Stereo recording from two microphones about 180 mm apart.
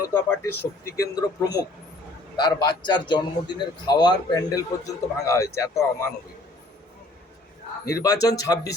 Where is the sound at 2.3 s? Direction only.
25° left (ahead or behind).